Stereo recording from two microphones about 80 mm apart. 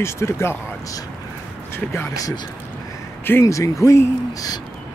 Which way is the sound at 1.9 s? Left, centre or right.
Left.